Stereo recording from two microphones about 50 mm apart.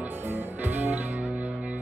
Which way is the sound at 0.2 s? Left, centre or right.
Right.